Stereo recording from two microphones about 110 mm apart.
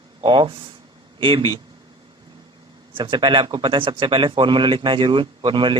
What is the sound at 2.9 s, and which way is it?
Speech, 50° right (ahead or behind).